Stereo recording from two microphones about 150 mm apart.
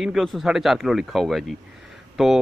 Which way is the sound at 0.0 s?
Centre (ahead or behind).